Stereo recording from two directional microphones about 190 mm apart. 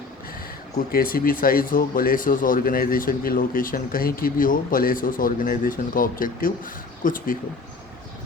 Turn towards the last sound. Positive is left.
turn(degrees=45)  # may be behind; listen again after turning